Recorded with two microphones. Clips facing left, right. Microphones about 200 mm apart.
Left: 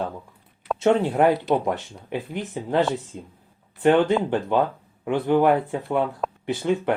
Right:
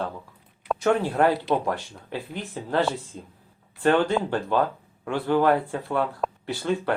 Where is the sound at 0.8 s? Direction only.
25° left (ahead or behind).